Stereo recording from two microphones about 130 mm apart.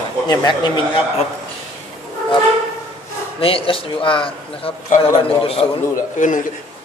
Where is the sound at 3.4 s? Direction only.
45° left (ahead or behind).